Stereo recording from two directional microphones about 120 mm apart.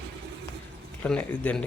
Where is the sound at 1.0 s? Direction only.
10° left (ahead or behind).